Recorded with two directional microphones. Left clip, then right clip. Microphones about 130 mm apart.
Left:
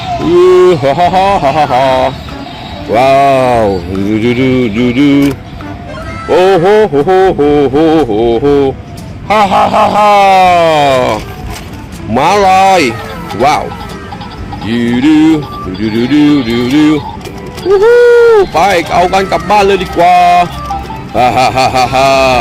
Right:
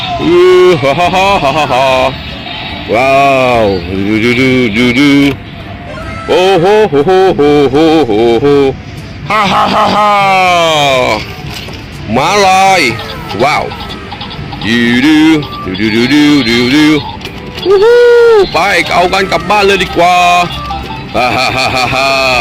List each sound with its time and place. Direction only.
0.3 s speech: centre (ahead or behind)
2.9 s speech: 10° left (ahead or behind)
7.1 s music: 10° right (ahead or behind)
9.2 s music: 20° right (ahead or behind)
10.7 s speech: 15° left (ahead or behind)
18.0 s music: 15° right (ahead or behind)
18.4 s speech: centre (ahead or behind)